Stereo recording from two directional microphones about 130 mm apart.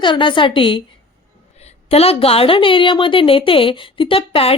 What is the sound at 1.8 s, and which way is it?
A woman's voice, 50° left (ahead or behind).